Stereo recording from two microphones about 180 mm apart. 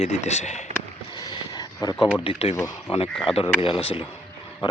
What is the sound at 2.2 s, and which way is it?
Speech, 35° left (ahead or behind).